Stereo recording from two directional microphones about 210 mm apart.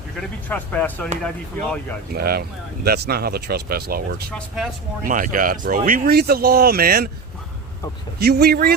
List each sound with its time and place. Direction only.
0.2 s speech: 5° left (ahead or behind)
2.1 s speech: 45° right (ahead or behind)
4.3 s speech: centre (ahead or behind)
5.0 s speech: 40° right (ahead or behind)
8.2 s speech: 50° right (ahead or behind)